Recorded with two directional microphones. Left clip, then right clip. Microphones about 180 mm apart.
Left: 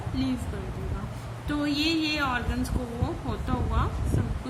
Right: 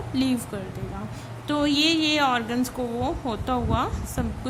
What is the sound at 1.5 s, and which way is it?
A woman's voice, 50° right (ahead or behind).